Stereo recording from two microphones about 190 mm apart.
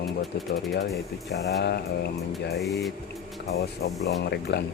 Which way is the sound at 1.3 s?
60° left (ahead or behind).